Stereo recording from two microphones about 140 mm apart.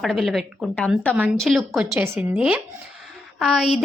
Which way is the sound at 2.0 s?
15° right (ahead or behind).